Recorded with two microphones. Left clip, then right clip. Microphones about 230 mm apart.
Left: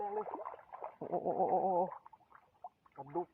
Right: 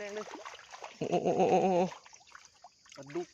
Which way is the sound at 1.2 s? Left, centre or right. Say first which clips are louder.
Right 6 dB; right.